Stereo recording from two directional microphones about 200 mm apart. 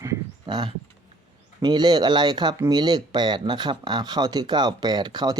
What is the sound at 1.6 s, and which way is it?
Speech, 20° right (ahead or behind).